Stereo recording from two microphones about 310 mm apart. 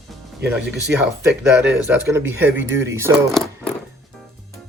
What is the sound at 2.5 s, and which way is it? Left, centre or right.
Speech, right.